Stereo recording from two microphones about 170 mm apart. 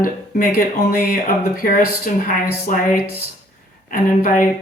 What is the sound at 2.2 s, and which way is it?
Speech, 55° left (ahead or behind).